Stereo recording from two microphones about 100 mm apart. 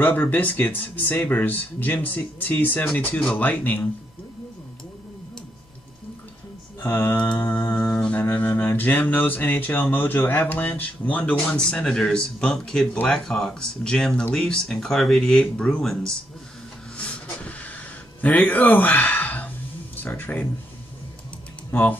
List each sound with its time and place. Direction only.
0.0 s speech: 15° left (ahead or behind)
6.8 s mantra: 20° left (ahead or behind)
7.3 s music: 20° left (ahead or behind)
7.7 s music: 5° left (ahead or behind)
8.1 s speech: 20° left (ahead or behind)
16.9 s vehicle: 15° left (ahead or behind)
18.2 s speech: 15° left (ahead or behind)